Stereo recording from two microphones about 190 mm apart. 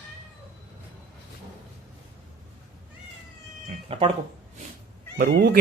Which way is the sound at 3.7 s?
30° right (ahead or behind).